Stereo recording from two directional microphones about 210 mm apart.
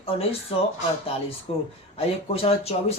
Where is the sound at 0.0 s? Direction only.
25° left (ahead or behind).